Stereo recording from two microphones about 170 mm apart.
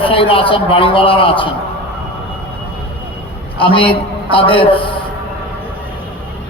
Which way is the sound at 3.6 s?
30° left (ahead or behind).